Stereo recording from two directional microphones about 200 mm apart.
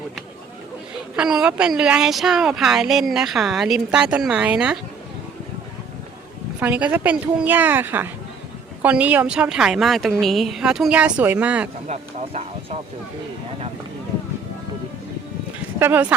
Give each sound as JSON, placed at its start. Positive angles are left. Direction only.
{"t": 1.1, "sound": "speech", "side_deg": -5}
{"t": 6.6, "sound": "a woman's voice", "side_deg": -10}
{"t": 11.9, "sound": "speech", "side_deg": -30}
{"t": 15.8, "sound": "a woman's voice", "side_deg": -10}